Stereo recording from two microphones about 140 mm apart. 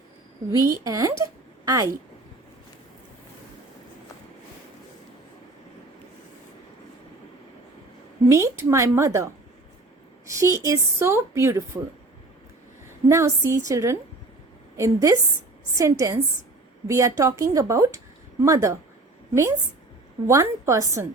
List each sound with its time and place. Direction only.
0.5 s a woman's voice: 20° right (ahead or behind)
8.3 s speech: 20° right (ahead or behind)
13.1 s a woman's voice: 20° right (ahead or behind)